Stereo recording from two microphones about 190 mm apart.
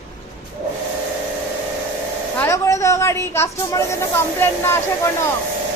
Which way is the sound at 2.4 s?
15° left (ahead or behind).